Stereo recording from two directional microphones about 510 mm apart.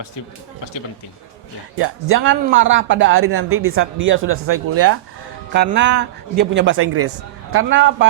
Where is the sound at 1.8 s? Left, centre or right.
Right.